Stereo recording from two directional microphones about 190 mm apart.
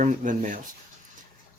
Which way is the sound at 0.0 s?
45° right (ahead or behind).